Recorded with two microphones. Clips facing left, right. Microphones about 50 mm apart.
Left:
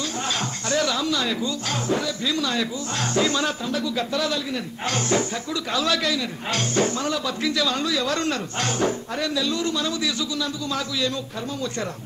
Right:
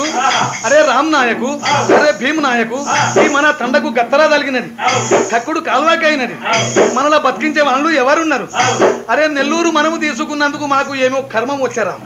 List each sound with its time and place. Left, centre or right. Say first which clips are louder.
0.2 s speech: right 14 dB; right